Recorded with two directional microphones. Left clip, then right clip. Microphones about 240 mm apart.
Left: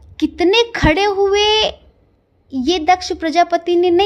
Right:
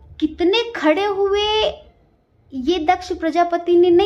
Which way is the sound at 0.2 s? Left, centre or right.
Left.